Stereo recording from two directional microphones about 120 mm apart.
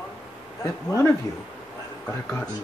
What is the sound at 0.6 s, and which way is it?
Speech, 25° left (ahead or behind).